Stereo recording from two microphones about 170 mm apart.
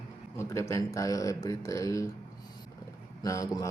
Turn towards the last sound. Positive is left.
turn(degrees=20)  # may be behind; listen again after turning